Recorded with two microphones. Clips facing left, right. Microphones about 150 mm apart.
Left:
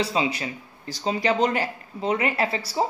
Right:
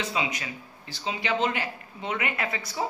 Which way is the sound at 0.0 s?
30° left (ahead or behind).